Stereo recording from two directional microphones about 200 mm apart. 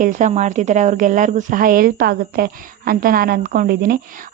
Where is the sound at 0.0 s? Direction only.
40° right (ahead or behind).